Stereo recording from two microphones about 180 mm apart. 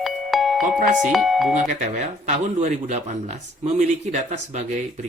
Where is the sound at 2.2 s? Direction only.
40° right (ahead or behind).